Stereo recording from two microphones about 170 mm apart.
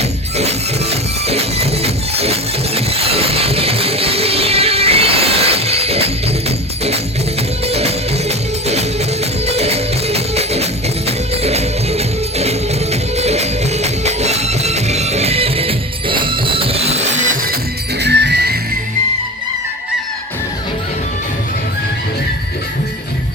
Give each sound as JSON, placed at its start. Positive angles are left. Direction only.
{"t": 0.3, "sound": "music", "side_deg": -40}
{"t": 7.7, "sound": "music", "side_deg": -35}
{"t": 18.0, "sound": "music", "side_deg": -85}